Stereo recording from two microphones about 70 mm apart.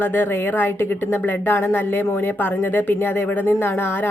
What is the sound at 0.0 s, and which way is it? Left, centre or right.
Speech, left.